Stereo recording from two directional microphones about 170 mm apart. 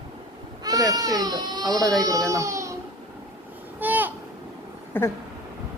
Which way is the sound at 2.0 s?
20° right (ahead or behind).